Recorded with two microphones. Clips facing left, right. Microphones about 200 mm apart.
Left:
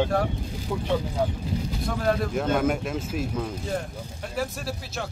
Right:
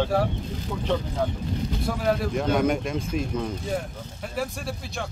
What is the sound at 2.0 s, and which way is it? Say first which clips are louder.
Speech: even; 5° right (ahead or behind).